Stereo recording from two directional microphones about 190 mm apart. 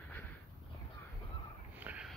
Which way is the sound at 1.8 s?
5° right (ahead or behind).